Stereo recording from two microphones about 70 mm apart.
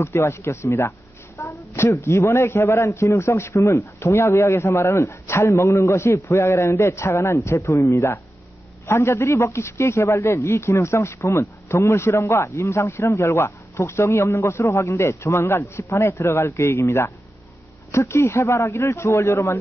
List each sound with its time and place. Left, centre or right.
0.0 s a man's voice: left